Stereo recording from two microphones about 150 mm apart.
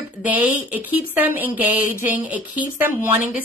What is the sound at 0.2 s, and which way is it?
A woman's voice, 10° right (ahead or behind).